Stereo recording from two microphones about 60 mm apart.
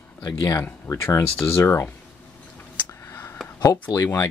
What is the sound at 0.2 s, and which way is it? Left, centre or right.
Speech, left.